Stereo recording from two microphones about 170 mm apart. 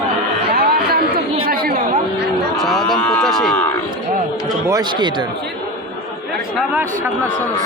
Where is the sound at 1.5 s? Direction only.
60° right (ahead or behind).